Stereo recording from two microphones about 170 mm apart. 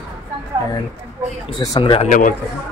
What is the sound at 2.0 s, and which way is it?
Speech, 50° left (ahead or behind).